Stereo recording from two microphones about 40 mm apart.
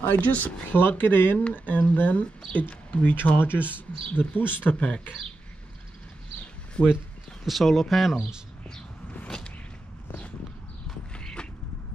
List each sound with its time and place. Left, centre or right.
0.0 s speech: left
0.7 s speech: left
1.5 s speech: left
4.7 s speech: left
6.8 s speech: left
7.4 s speech: centre